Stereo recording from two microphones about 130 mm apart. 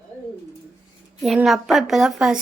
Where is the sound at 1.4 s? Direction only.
Centre (ahead or behind).